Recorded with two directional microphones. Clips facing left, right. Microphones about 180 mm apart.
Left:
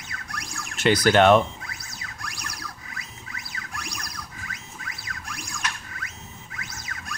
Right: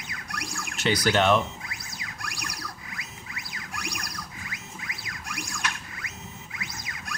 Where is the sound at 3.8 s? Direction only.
10° right (ahead or behind).